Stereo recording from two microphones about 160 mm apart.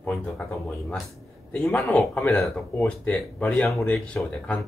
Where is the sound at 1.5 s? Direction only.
5° left (ahead or behind).